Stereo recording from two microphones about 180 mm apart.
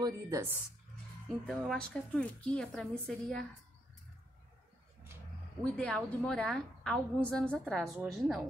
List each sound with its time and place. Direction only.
0.0 s speech: 15° right (ahead or behind)
1.5 s a woman's voice: centre (ahead or behind)
5.6 s a woman's voice: 5° left (ahead or behind)